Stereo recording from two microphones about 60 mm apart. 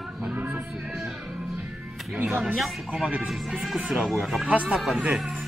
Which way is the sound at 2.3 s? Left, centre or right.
Centre.